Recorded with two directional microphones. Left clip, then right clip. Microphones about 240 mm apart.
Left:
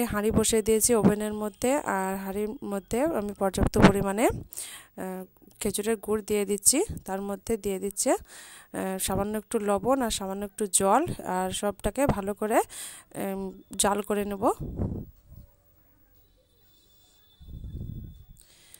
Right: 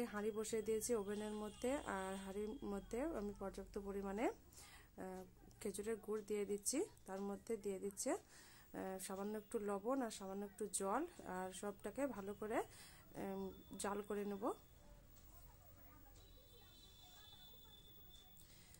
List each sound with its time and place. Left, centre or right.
0.0 s speech: left